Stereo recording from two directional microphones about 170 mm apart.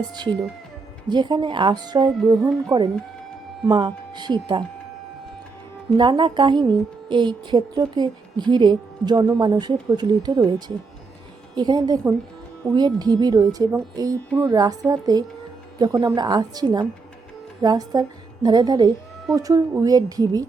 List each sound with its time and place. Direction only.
1.1 s a woman's voice: 25° right (ahead or behind)
3.7 s a woman's voice: 25° right (ahead or behind)
6.0 s a woman's voice: 30° right (ahead or behind)
11.5 s a woman's voice: 25° right (ahead or behind)